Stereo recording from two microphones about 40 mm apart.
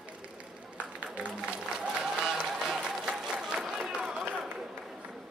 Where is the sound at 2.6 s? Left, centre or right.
Centre.